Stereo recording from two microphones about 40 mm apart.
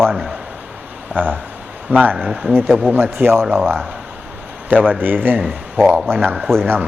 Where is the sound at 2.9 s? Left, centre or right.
Right.